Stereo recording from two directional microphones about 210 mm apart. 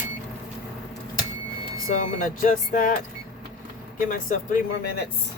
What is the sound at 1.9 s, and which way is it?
Speech, 35° left (ahead or behind).